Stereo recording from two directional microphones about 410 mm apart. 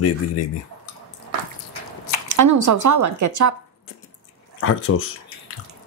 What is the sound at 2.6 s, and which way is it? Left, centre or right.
Speech, right.